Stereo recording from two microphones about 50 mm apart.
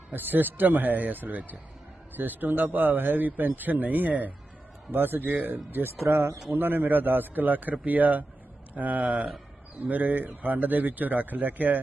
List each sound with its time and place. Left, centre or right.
0.1 s speech: right